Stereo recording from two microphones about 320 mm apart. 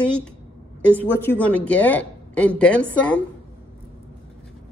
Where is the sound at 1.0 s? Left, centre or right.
Centre.